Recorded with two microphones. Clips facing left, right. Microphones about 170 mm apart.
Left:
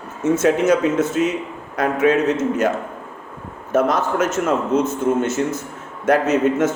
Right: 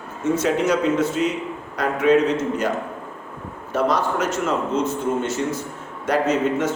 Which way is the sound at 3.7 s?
50° left (ahead or behind).